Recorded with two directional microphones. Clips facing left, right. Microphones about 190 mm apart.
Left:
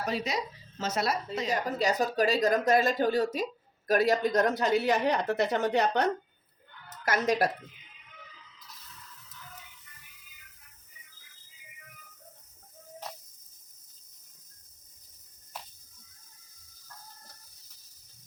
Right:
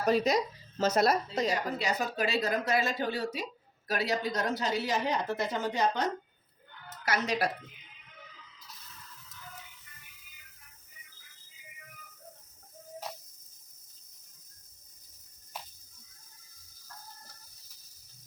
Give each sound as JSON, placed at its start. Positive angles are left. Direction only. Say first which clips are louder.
{"t": 0.0, "sound": "speech", "louder": "right 5 dB", "side_deg": -40}
{"t": 1.8, "sound": "a woman's voice", "louder": "left 5 dB", "side_deg": 40}
{"t": 7.0, "sound": "speech", "louder": "left 4 dB", "side_deg": 50}